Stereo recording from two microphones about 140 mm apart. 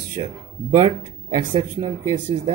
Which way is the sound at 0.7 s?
35° right (ahead or behind).